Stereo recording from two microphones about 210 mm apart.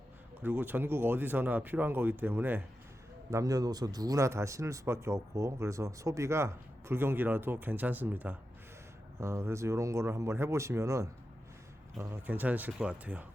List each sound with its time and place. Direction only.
0.4 s speech: 10° right (ahead or behind)